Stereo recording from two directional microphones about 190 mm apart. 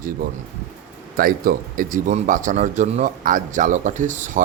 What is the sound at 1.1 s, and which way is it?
Speech, 50° right (ahead or behind).